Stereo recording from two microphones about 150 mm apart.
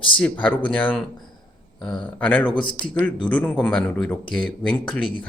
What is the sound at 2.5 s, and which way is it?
Speech, 35° left (ahead or behind).